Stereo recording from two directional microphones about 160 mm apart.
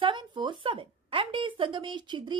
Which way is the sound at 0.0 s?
30° right (ahead or behind).